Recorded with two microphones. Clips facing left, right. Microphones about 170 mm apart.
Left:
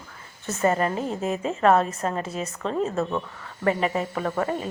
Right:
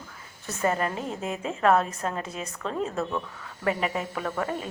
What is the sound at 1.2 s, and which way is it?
Speech, 40° left (ahead or behind).